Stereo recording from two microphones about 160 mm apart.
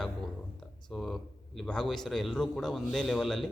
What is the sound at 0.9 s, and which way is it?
Speech, centre (ahead or behind).